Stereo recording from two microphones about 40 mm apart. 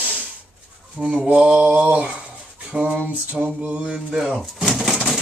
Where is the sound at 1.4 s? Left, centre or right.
Right.